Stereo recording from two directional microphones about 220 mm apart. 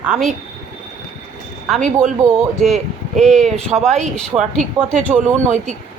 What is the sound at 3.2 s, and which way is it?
Speech, centre (ahead or behind).